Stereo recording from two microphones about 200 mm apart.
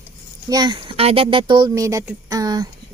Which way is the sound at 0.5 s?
20° right (ahead or behind).